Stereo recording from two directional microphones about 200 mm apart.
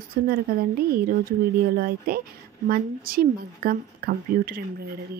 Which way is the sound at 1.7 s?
50° right (ahead or behind).